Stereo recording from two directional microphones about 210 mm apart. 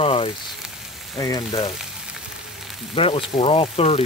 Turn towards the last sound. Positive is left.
turn(degrees=25)  # may be behind; listen again after turning